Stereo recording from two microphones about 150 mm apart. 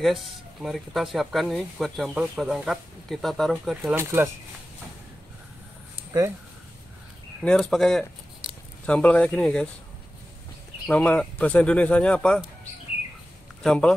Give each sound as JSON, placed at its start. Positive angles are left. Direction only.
{"t": 0.0, "sound": "speech", "side_deg": 0}
{"t": 3.7, "sound": "speech", "side_deg": -10}
{"t": 7.4, "sound": "speech", "side_deg": 5}
{"t": 10.9, "sound": "speech", "side_deg": 10}
{"t": 13.6, "sound": "speech", "side_deg": 5}